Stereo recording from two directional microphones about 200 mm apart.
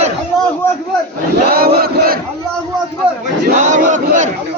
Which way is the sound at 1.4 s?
50° right (ahead or behind).